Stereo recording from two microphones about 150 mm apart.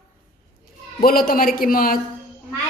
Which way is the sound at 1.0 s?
80° left.